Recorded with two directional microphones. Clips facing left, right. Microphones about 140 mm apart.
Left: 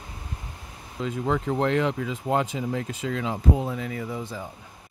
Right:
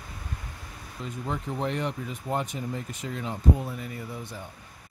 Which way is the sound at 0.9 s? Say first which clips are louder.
Left 7 dB; 90° left.